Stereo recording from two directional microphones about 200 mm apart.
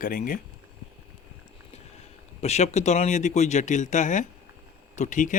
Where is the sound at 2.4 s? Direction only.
35° left (ahead or behind).